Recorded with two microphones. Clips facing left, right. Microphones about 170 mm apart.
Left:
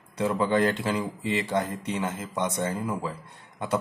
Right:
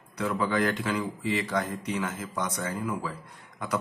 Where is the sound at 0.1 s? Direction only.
25° left (ahead or behind).